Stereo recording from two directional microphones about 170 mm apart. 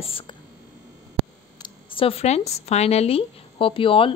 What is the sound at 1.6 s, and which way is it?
Speech, 35° left (ahead or behind).